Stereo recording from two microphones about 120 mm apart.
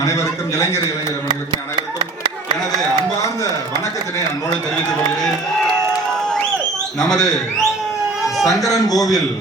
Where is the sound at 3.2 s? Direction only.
25° left (ahead or behind).